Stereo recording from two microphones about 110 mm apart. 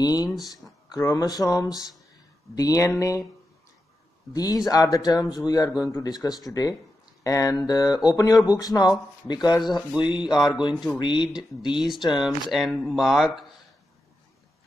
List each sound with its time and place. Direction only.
0.0 s speech: 35° left (ahead or behind)
4.3 s speech: 35° left (ahead or behind)
10.7 s speech: centre (ahead or behind)
11.0 s speech: 45° left (ahead or behind)
12.2 s speech: 5° right (ahead or behind)